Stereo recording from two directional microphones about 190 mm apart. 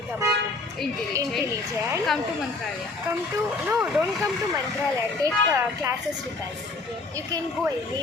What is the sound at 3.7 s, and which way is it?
Speech, 10° right (ahead or behind).